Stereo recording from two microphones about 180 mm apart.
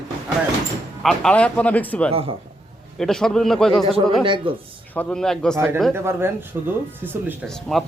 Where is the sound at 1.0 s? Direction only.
5° left (ahead or behind).